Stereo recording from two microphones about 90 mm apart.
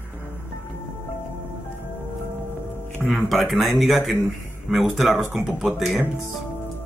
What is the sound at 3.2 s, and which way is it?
Speech, centre (ahead or behind).